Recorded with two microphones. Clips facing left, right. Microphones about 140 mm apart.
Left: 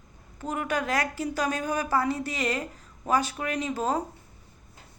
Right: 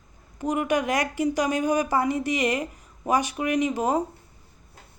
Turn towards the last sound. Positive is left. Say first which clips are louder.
# right 5 dB
turn(degrees=-15)  # may be behind; listen again after turning